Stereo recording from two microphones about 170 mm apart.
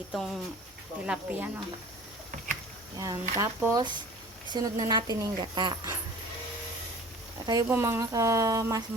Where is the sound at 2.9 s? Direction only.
20° right (ahead or behind).